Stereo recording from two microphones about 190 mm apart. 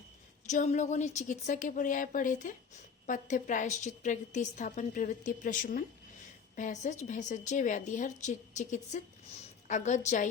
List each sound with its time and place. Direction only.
0.5 s a woman's voice: 40° left (ahead or behind)